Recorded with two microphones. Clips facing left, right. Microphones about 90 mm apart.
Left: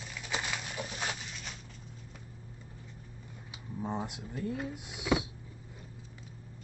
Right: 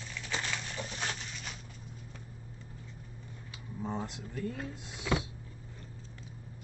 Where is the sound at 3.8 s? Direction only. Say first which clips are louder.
Left 1 dB; 15° left (ahead or behind).